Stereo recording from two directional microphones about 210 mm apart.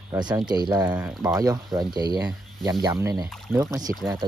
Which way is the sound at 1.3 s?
15° right (ahead or behind).